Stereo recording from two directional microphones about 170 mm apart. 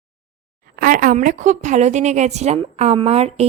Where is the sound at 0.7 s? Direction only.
55° right (ahead or behind).